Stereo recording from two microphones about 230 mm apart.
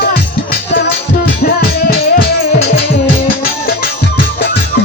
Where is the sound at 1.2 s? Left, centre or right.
Left.